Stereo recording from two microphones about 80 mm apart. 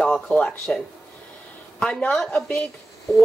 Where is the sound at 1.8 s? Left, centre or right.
Centre.